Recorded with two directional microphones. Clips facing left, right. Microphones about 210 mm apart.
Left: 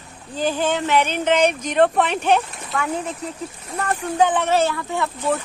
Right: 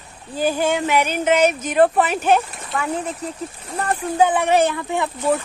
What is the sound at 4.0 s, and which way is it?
Speech, 10° right (ahead or behind).